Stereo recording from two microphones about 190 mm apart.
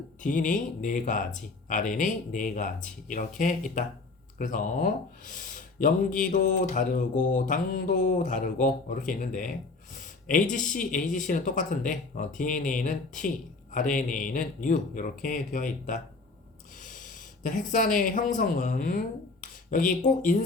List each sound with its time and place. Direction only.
0.2 s speech: 45° left (ahead or behind)
17.4 s speech: 45° left (ahead or behind)